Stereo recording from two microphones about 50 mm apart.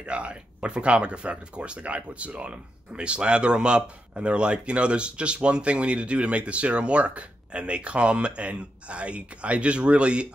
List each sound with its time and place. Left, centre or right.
0.0 s speech: right